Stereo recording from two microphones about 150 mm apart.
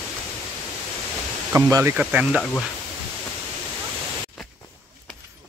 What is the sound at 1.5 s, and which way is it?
Speech, 20° right (ahead or behind).